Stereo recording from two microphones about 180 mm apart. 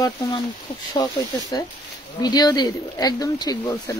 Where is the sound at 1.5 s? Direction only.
20° left (ahead or behind).